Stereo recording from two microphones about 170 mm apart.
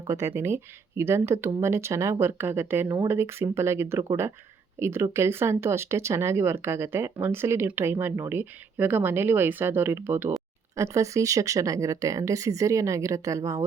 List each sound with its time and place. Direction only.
0.1 s speech: 15° right (ahead or behind)